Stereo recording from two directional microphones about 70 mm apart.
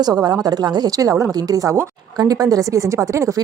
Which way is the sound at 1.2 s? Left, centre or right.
Right.